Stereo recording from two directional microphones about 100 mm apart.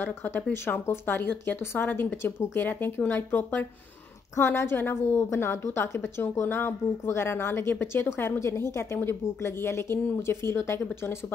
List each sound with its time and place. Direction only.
0.0 s a woman's voice: 20° left (ahead or behind)